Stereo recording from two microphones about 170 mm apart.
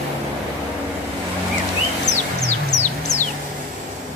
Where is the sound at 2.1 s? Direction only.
45° left (ahead or behind).